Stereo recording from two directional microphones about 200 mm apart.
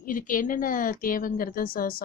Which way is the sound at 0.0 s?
45° left (ahead or behind).